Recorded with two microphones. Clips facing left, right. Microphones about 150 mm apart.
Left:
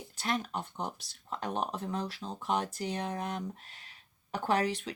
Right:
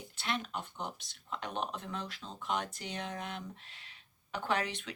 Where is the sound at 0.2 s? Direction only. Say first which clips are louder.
Left 4 dB; 40° left (ahead or behind).